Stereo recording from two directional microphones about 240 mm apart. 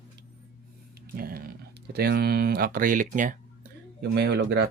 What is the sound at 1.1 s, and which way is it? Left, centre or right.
Speech, right.